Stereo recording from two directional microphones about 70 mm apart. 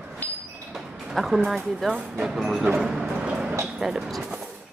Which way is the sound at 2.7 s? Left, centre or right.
Centre.